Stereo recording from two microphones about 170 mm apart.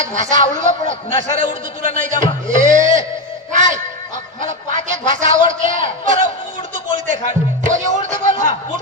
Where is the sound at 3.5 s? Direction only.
45° right (ahead or behind).